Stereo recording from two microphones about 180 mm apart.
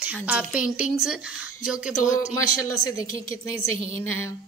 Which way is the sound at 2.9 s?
20° left (ahead or behind).